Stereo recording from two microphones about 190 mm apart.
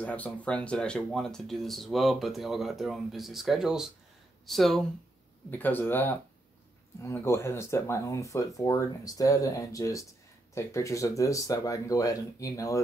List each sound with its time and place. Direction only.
0.0 s speech: 5° left (ahead or behind)